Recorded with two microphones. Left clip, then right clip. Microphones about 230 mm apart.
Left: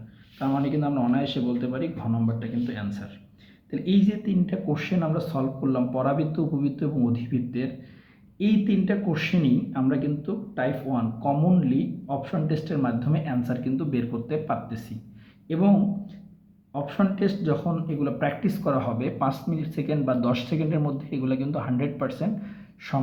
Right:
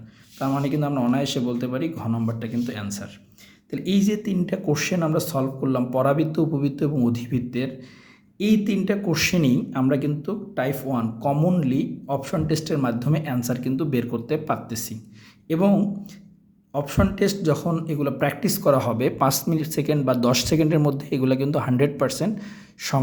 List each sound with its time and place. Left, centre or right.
0.3 s a man's voice: right